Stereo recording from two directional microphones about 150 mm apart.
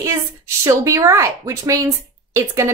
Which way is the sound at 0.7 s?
20° right (ahead or behind).